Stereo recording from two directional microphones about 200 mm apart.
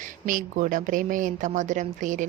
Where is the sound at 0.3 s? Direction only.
40° right (ahead or behind).